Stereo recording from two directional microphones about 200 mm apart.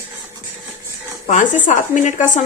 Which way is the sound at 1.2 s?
40° left (ahead or behind).